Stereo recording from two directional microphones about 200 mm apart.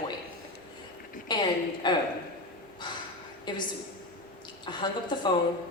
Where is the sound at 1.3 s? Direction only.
20° left (ahead or behind).